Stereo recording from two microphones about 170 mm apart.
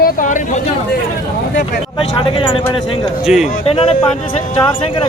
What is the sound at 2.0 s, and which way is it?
Speech, 30° left (ahead or behind).